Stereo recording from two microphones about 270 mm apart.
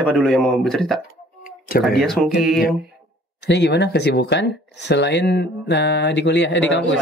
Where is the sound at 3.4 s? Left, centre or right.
Left.